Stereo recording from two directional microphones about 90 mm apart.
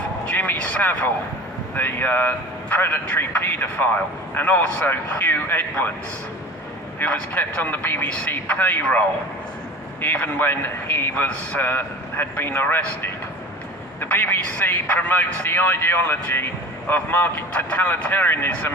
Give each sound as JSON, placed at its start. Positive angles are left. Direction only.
{"t": 0.3, "sound": "vehicle", "side_deg": 20}
{"t": 1.7, "sound": "a man's voice", "side_deg": 20}
{"t": 7.0, "sound": "a man's voice", "side_deg": 20}